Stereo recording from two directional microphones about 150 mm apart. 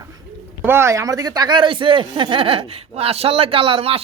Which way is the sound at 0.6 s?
15° right (ahead or behind).